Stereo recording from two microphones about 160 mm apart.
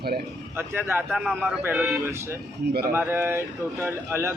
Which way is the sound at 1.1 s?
Centre (ahead or behind).